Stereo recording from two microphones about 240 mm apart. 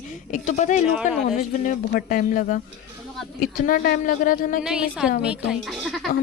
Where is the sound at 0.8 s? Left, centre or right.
Centre.